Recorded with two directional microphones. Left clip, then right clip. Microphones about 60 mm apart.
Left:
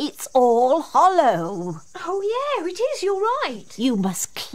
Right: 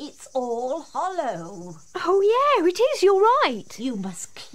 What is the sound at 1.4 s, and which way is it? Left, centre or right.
Speech, centre.